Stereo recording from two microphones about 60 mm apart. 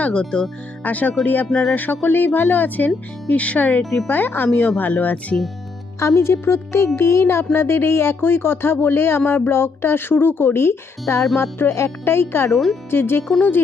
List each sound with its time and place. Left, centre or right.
0.0 s speech: centre
0.9 s speech: left
1.5 s speech: centre
1.7 s speech: left
3.8 s speech: centre
4.1 s speech: left
6.0 s speech: left
12.5 s speech: centre
12.9 s speech: left